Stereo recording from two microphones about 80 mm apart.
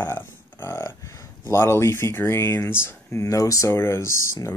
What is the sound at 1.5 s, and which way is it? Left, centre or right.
Speech, left.